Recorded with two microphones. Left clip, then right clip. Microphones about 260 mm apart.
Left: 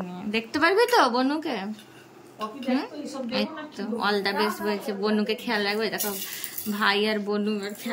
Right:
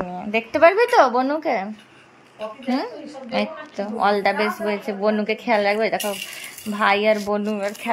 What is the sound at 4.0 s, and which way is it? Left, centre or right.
Speech, centre.